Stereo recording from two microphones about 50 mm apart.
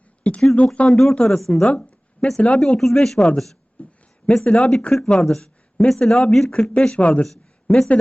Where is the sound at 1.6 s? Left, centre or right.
Left.